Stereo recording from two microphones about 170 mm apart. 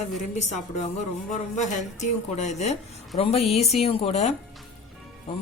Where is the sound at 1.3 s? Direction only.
45° left (ahead or behind).